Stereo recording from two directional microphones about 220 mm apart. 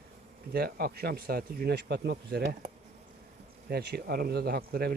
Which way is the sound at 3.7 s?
45° right (ahead or behind).